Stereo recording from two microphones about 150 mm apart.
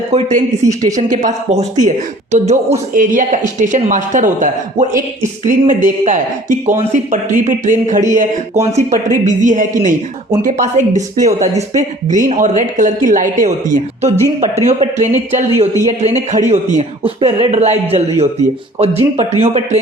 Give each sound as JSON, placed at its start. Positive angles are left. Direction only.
{"t": 0.1, "sound": "speech", "side_deg": -55}
{"t": 0.7, "sound": "a woman's voice", "side_deg": -25}
{"t": 0.9, "sound": "speech", "side_deg": -55}
{"t": 2.9, "sound": "speech", "side_deg": -60}
{"t": 14.4, "sound": "speech", "side_deg": -45}